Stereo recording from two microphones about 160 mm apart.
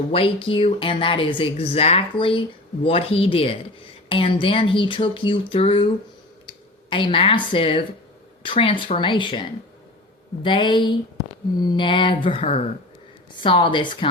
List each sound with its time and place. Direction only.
0.1 s a woman's voice: 35° left (ahead or behind)
6.9 s a woman's voice: 35° left (ahead or behind)
13.3 s a woman's voice: 30° left (ahead or behind)